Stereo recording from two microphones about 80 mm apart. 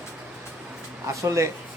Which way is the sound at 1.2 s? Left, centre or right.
Right.